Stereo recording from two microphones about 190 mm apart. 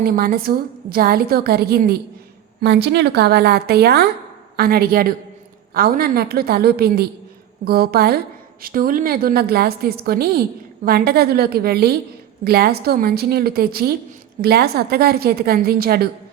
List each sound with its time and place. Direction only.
0.0 s a woman's voice: 50° right (ahead or behind)